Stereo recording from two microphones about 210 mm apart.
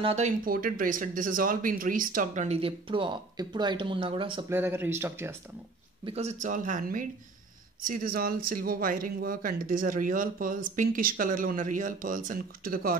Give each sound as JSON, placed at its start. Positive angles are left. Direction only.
{"t": 0.0, "sound": "speech", "side_deg": -30}
{"t": 0.5, "sound": "speech", "side_deg": -40}
{"t": 4.5, "sound": "speech", "side_deg": -10}
{"t": 6.0, "sound": "speech", "side_deg": -30}